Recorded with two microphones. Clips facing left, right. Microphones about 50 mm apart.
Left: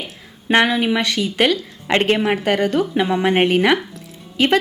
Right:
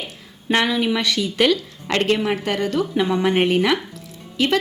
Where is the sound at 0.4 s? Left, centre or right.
Left.